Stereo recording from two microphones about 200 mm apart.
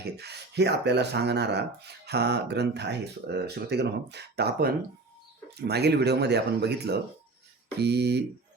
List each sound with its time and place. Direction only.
0.0 s speech: 55° right (ahead or behind)